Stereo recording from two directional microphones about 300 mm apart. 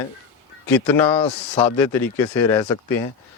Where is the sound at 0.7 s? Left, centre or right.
Centre.